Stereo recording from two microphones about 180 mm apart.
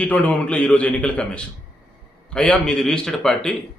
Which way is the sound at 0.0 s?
10° left (ahead or behind).